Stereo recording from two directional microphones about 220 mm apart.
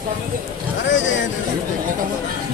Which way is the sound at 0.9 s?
55° left (ahead or behind).